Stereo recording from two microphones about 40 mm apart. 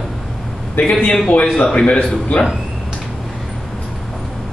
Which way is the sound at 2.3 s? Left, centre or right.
Left.